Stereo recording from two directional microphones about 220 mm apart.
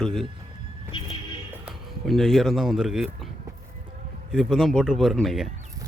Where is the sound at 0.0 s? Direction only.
Centre (ahead or behind).